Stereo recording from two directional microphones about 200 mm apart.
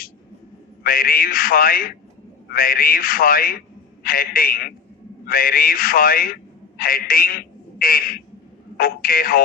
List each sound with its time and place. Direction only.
0.9 s a man's voice: 45° left (ahead or behind)